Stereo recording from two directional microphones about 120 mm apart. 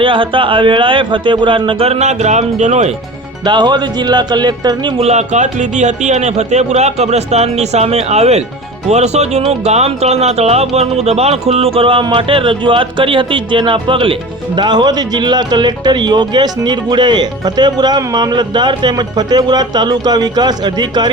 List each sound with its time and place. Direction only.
0.0 s speech: 45° right (ahead or behind); by 2.9 s 75° right (ahead or behind)
3.4 s speech: 40° right (ahead or behind)
5.0 s speech: 75° right (ahead or behind); by 21.1 s 35° right (ahead or behind)